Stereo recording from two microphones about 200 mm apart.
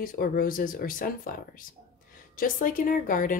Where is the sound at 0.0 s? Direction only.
45° left (ahead or behind).